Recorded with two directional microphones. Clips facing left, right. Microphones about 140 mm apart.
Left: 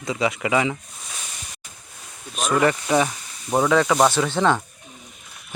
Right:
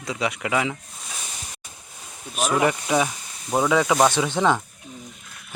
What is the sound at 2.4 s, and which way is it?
Speech, 10° right (ahead or behind).